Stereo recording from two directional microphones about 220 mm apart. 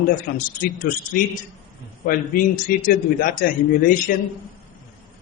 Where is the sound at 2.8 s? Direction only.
40° left (ahead or behind).